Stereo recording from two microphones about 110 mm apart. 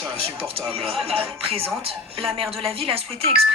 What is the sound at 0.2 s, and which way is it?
Speech, 60° right (ahead or behind).